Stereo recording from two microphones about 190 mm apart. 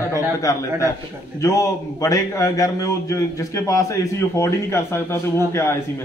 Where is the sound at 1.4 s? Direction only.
15° left (ahead or behind).